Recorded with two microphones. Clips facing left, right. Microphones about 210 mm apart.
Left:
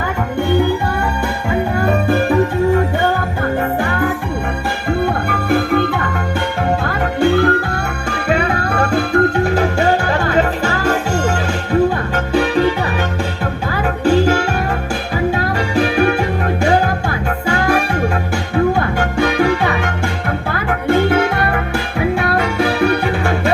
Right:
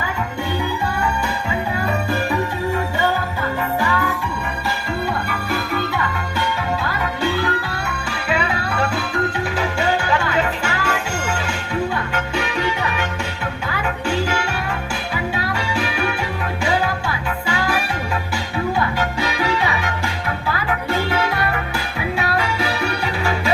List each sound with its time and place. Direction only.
1.5 s music: 55° left (ahead or behind); by 12.6 s 35° left (ahead or behind)
14.0 s music: 40° left (ahead or behind)
15.4 s music: 40° left (ahead or behind)